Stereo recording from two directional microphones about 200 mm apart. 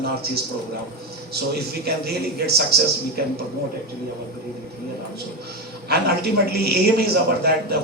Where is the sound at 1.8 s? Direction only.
55° right (ahead or behind).